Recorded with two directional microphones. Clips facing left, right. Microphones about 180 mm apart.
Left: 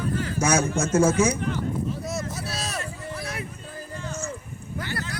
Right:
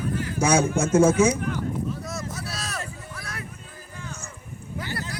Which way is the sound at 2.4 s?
25° left (ahead or behind).